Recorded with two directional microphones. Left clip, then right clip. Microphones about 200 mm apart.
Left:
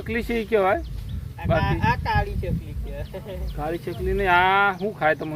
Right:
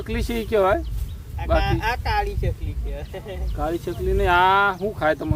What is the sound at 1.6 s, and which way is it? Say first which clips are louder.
Speech: even; 50° right (ahead or behind).